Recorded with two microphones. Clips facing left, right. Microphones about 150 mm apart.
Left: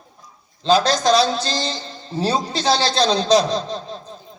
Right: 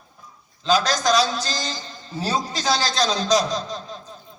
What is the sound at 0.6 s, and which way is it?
A man's voice, 30° left (ahead or behind).